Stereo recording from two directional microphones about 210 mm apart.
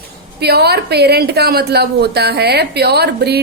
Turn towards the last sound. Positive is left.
turn(degrees=-50)  # may be behind; listen again after turning